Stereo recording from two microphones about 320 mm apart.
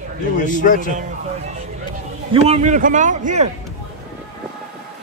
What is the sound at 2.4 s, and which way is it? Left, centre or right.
A man's voice, right.